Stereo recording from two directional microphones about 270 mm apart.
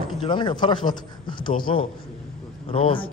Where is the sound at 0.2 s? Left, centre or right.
Centre.